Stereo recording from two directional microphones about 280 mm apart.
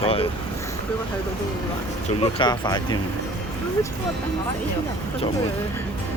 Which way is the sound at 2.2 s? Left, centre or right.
Centre.